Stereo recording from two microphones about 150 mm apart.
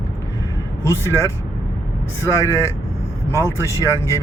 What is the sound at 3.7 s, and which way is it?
Speech, 20° left (ahead or behind).